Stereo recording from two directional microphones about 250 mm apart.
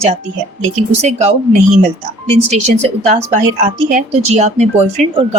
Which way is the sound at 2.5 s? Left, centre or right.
Right.